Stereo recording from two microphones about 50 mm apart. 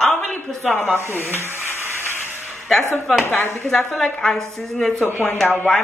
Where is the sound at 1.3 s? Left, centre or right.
Right.